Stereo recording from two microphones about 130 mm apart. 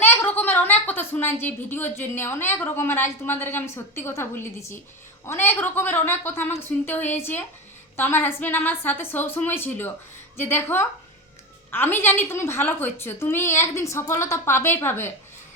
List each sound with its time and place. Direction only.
0.0 s a woman's voice: 15° left (ahead or behind)